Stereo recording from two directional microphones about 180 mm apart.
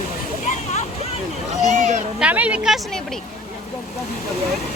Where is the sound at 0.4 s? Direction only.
40° left (ahead or behind).